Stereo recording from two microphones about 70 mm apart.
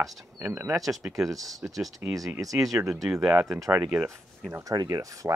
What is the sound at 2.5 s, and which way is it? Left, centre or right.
Speech, right.